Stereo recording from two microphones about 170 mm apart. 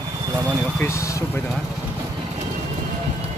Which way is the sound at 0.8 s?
15° left (ahead or behind).